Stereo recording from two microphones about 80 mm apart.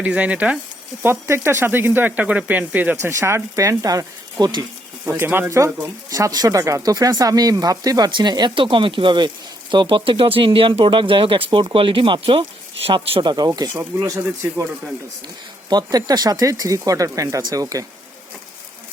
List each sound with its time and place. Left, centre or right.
0.0 s speech: centre
1.0 s speech: right
3.0 s speech: right
5.0 s speech: right
5.5 s speech: right
8.1 s speech: right
12.9 s speech: right
14.0 s speech: right
15.7 s speech: right